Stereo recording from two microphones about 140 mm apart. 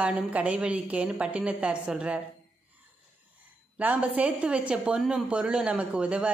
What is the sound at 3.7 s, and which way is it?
A woman's voice, 10° right (ahead or behind).